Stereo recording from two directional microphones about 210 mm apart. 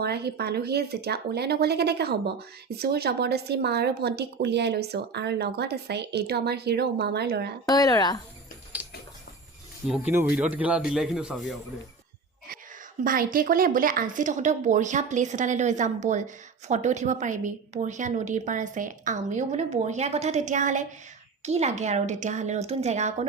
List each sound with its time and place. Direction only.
0.0 s speech: 50° right (ahead or behind)
7.6 s speech: 15° left (ahead or behind)
8.8 s a sound: 10° right (ahead or behind)
9.8 s a man's voice: 5° right (ahead or behind)
13.1 s a woman's voice: 40° right (ahead or behind)